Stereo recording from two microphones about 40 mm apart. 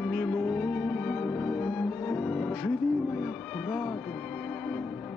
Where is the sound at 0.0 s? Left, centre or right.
Left.